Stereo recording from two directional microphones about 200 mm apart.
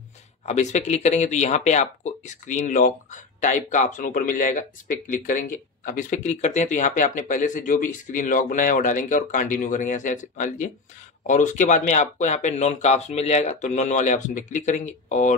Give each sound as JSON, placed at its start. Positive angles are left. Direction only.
{"t": 0.5, "sound": "speech", "side_deg": 35}